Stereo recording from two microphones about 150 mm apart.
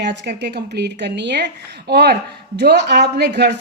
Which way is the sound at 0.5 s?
90° right.